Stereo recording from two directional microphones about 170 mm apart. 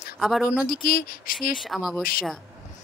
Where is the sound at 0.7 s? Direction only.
60° left (ahead or behind).